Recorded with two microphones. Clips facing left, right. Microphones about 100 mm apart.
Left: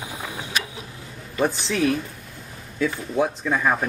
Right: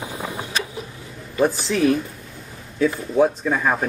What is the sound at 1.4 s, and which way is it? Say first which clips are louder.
Speech: right 3 dB; centre (ahead or behind).